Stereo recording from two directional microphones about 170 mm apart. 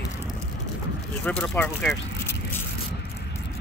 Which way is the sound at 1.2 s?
10° left (ahead or behind).